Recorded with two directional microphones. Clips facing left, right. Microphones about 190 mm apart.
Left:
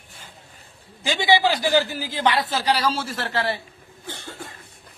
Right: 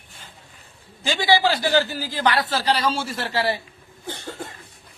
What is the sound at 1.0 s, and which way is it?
A man's voice, 20° left (ahead or behind).